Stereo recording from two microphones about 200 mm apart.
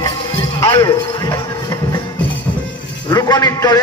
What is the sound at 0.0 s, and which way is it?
Music, 15° left (ahead or behind).